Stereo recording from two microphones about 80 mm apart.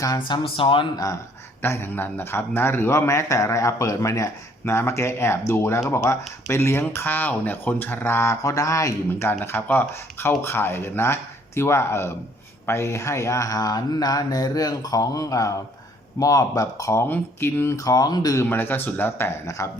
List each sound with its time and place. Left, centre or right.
0.3 s speech: left
0.9 s mantra: left
1.6 s a man's voice: left
8.4 s mantra: left
9.4 s a man's voice: left
12.6 s mantra: left
17.1 s a man's voice: left
17.7 s mantra: left
18.4 s speech: left